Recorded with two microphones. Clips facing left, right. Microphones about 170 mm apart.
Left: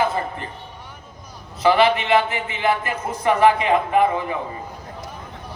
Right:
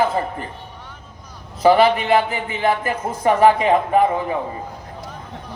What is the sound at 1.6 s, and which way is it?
A man's voice, 40° right (ahead or behind).